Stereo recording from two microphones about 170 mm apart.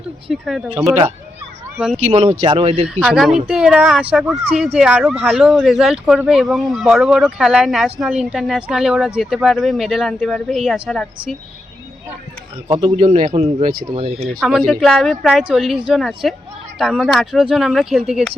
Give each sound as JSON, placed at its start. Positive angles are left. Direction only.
{"t": 0.3, "sound": "speech", "side_deg": 0}
{"t": 2.0, "sound": "a man's voice", "side_deg": -40}
{"t": 2.8, "sound": "speech", "side_deg": -5}
{"t": 12.8, "sound": "a man's voice", "side_deg": -40}
{"t": 14.3, "sound": "speech", "side_deg": 0}